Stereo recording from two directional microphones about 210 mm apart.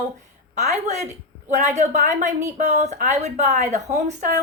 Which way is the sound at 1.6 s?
35° right (ahead or behind).